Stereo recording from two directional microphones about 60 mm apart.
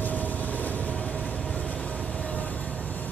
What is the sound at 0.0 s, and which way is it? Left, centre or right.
Train, left.